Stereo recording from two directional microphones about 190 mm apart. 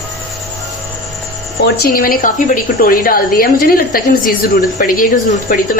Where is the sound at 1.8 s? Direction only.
50° left (ahead or behind).